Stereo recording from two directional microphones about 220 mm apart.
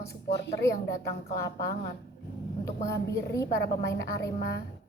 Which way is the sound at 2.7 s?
15° left (ahead or behind).